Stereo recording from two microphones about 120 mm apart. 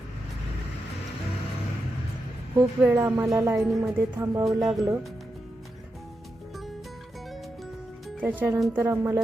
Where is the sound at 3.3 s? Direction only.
25° right (ahead or behind).